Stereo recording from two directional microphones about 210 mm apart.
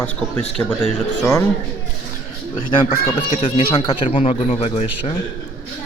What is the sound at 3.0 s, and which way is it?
Speech, 35° left (ahead or behind).